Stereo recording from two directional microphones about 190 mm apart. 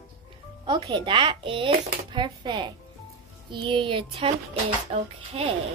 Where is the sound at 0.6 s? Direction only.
25° right (ahead or behind).